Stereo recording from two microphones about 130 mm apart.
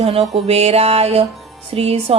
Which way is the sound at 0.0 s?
55° right (ahead or behind).